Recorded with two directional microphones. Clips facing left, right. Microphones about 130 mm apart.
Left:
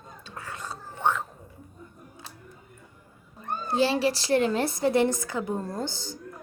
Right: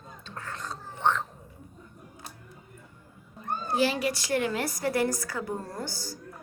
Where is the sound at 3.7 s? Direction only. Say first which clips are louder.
Left 3 dB; 30° left (ahead or behind).